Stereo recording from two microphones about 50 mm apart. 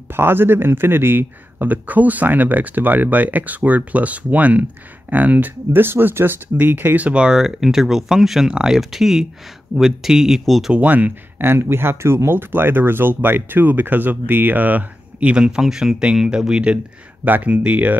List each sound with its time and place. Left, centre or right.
0.1 s a man's voice: right
5.7 s speech: right
7.0 s speech: right
7.3 s speech: centre
10.7 s a man's voice: right
11.4 s speech: right; by 15.6 s centre
15.6 s a man's voice: centre; by 17.9 s right